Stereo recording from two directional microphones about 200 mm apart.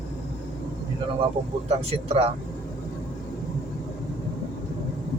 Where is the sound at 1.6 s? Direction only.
30° right (ahead or behind).